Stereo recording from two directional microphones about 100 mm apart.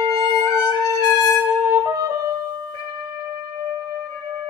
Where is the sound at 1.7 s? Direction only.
30° right (ahead or behind).